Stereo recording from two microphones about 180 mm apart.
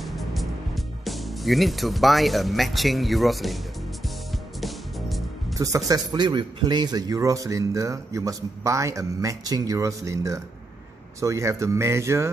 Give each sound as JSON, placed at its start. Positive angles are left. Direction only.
{"t": 0.0, "sound": "music", "side_deg": 0}
{"t": 5.6, "sound": "a man's voice", "side_deg": -20}